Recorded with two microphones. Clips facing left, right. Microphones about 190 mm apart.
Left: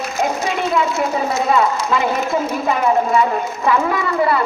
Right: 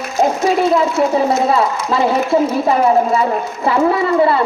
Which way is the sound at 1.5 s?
30° right (ahead or behind).